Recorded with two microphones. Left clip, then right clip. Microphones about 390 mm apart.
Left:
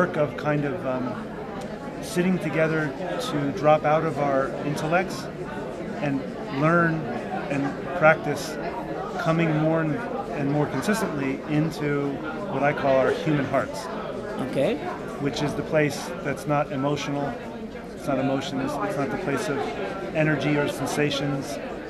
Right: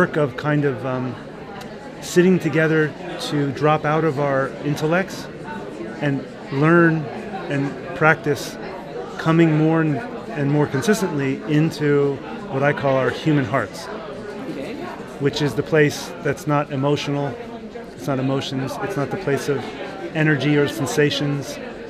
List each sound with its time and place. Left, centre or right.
0.0 s a man's voice: right
2.1 s a man's voice: right
6.6 s a man's voice: right
8.0 s a man's voice: right
15.2 s a man's voice: right